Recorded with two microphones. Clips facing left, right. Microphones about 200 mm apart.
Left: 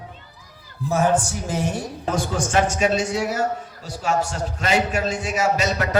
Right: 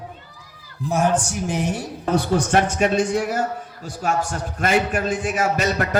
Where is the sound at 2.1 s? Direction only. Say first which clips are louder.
Right 3 dB; 60° right (ahead or behind).